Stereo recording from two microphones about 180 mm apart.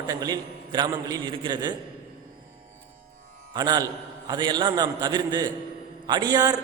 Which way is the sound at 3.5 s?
20° right (ahead or behind).